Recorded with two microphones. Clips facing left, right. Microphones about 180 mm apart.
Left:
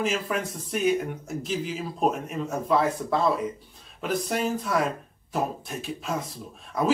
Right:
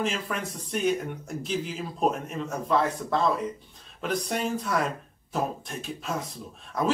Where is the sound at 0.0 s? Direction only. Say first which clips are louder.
Left 3 dB; 5° left (ahead or behind).